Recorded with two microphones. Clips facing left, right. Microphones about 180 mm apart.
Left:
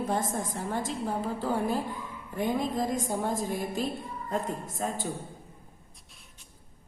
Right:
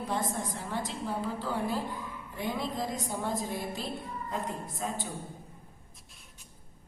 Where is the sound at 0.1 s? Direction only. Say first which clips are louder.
Left 3 dB; 50° left (ahead or behind).